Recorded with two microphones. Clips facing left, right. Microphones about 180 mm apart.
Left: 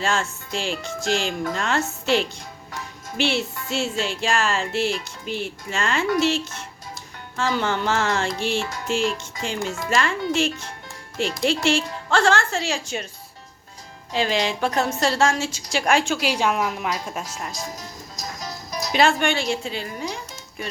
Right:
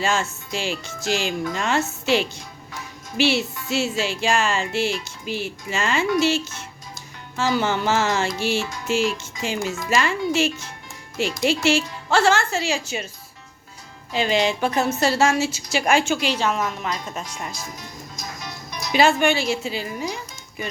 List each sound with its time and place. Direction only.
0.0 s speech: centre (ahead or behind)
14.1 s speech: centre (ahead or behind)
16.3 s a woman's voice: 10° left (ahead or behind)
17.5 s music: 40° left (ahead or behind)
18.9 s speech: 5° right (ahead or behind)